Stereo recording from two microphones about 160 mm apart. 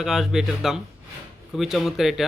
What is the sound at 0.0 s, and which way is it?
Speech, centre (ahead or behind).